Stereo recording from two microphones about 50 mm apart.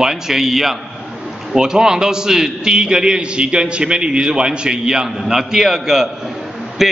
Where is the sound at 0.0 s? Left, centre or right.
Centre.